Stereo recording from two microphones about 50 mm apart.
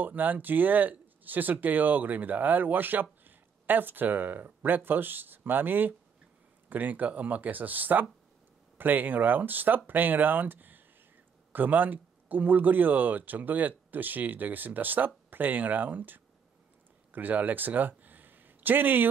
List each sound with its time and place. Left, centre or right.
0.0 s speech: right